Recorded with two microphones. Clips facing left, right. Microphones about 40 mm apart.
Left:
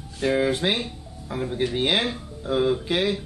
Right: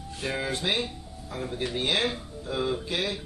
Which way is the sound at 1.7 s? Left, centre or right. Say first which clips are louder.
Left 1 dB; left.